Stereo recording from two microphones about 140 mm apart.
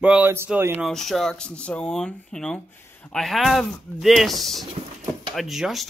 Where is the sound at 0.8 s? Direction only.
Centre (ahead or behind).